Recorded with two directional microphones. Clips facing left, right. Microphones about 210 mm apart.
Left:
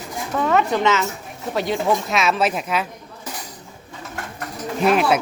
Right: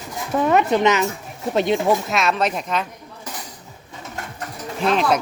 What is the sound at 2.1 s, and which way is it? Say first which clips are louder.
Speech: left 1 dB; centre (ahead or behind).